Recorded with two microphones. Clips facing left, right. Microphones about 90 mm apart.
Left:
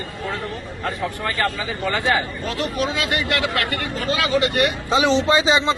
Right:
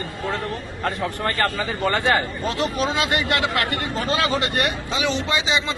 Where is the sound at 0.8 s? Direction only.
45° right (ahead or behind).